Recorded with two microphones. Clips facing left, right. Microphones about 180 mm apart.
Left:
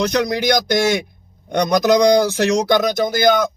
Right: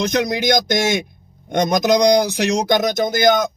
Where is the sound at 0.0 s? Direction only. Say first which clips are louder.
Left 1 dB; 20° right (ahead or behind).